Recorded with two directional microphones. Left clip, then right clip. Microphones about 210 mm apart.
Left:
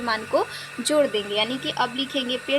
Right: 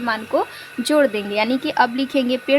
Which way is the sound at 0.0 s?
20° right (ahead or behind).